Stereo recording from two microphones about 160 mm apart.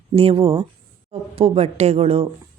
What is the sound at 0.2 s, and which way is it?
A woman's voice, 35° right (ahead or behind).